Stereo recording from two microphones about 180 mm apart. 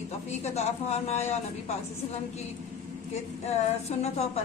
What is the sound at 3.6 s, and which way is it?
Speech, 35° left (ahead or behind).